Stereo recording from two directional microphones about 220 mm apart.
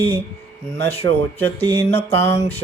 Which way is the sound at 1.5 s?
25° left (ahead or behind).